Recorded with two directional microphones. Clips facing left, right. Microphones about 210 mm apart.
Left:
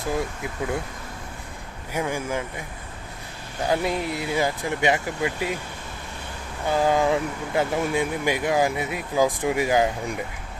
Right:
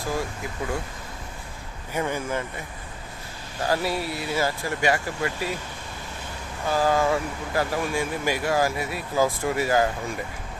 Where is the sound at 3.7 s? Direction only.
20° left (ahead or behind).